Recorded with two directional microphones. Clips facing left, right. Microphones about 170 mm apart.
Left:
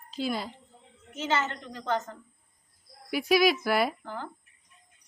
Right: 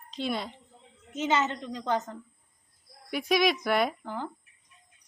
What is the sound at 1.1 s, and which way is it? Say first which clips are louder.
Speech: right 2 dB; 20° right (ahead or behind).